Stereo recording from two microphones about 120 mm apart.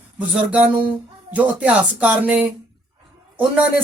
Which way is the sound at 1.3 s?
10° right (ahead or behind).